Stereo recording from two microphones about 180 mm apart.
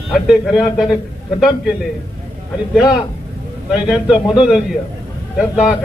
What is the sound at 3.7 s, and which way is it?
A man's voice, 5° right (ahead or behind).